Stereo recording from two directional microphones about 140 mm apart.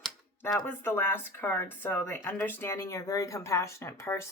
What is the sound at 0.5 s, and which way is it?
Speech, 15° left (ahead or behind).